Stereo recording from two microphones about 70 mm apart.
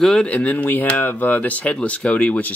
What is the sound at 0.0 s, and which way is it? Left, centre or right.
Speech, centre.